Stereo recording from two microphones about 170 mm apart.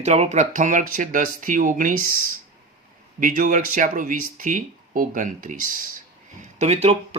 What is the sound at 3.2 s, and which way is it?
Speech, 50° right (ahead or behind).